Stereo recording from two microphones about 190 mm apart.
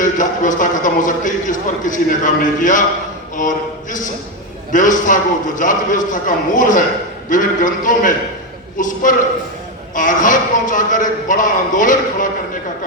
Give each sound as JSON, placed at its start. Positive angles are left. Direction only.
{"t": 0.0, "sound": "a man's voice", "side_deg": 45}